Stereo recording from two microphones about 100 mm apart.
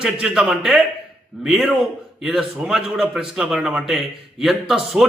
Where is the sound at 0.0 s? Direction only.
10° right (ahead or behind).